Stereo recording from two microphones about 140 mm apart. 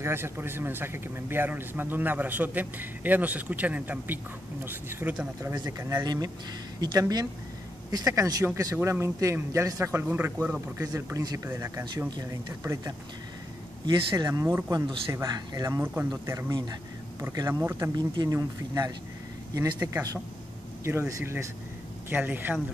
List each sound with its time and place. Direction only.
0.0 s speech: 15° right (ahead or behind)
5.4 s a man's voice: 20° right (ahead or behind)
17.9 s a man's voice: 30° right (ahead or behind); by 22.6 s 15° right (ahead or behind)